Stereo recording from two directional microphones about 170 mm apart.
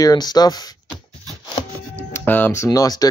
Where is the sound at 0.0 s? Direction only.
25° left (ahead or behind).